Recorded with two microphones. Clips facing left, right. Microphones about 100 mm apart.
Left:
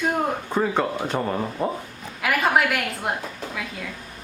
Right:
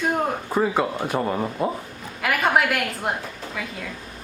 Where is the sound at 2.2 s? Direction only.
Centre (ahead or behind).